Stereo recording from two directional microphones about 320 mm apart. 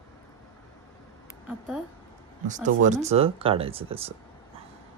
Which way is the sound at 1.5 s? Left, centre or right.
Centre.